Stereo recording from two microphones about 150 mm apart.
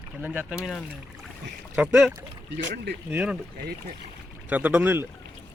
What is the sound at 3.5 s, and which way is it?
Speech, 90° right.